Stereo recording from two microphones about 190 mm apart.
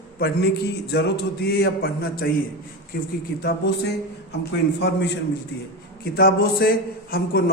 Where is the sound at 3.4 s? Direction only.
60° left (ahead or behind).